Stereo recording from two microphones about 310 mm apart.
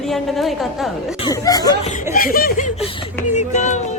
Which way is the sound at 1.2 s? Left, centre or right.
Centre.